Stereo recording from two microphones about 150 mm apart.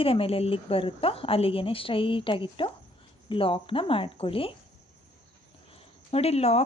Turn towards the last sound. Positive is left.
turn(degrees=45)  # may be behind; listen again after turning